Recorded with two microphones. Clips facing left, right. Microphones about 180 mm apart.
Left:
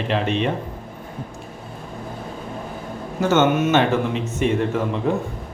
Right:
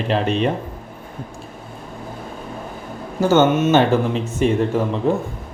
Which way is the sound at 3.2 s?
35° right (ahead or behind).